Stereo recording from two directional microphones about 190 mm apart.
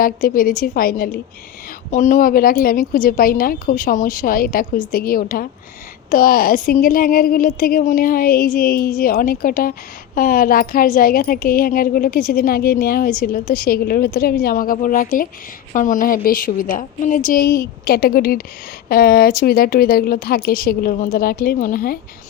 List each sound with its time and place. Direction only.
0.0 s speech: 50° left (ahead or behind)